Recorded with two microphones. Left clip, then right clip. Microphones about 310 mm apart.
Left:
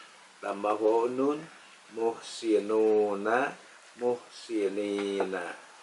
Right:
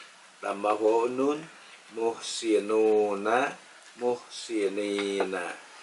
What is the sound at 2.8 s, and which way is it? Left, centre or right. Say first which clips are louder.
Speech: right 2 dB; left.